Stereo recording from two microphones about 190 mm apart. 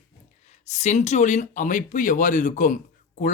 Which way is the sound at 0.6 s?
40° left (ahead or behind).